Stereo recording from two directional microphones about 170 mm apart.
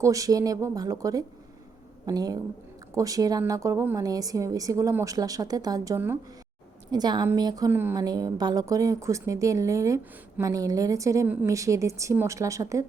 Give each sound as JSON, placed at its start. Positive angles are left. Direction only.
{"t": 0.0, "sound": "a woman's voice", "side_deg": -20}